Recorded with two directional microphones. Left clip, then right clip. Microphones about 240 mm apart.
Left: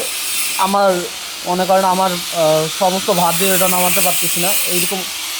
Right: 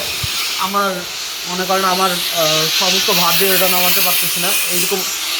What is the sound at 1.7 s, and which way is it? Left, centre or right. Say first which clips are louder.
Speech: left 1 dB; left.